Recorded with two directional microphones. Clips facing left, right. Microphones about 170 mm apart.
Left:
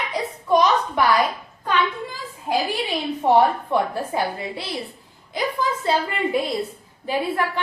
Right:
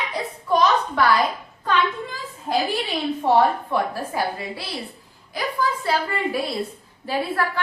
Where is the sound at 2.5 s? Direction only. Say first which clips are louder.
Even; 10° left (ahead or behind).